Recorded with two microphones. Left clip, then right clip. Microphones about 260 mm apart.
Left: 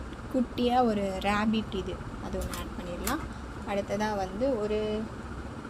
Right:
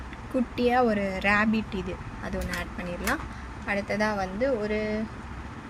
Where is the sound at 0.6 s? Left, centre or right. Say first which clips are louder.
Right 3 dB; right.